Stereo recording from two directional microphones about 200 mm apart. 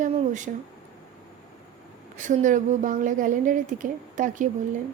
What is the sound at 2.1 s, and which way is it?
A woman's voice, 40° right (ahead or behind).